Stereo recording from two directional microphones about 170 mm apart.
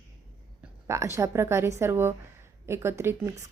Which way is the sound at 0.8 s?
15° right (ahead or behind).